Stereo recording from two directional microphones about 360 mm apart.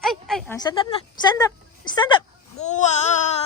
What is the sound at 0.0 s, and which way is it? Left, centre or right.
Speech, centre.